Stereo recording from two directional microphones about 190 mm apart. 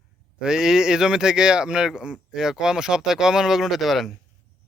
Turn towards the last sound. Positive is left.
turn(degrees=0)  # may be behind; listen again after turning